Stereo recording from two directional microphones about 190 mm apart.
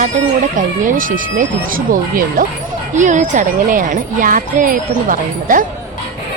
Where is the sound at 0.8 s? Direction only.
45° right (ahead or behind).